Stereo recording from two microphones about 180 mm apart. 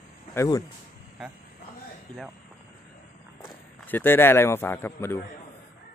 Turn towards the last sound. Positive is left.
turn(degrees=10)  # may be behind; listen again after turning